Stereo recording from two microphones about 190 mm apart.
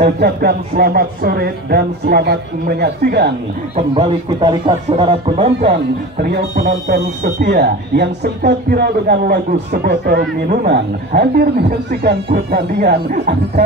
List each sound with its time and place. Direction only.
0.0 s speech: 60° right (ahead or behind)
3.7 s speech: 30° right (ahead or behind)
6.2 s speech: 50° right (ahead or behind)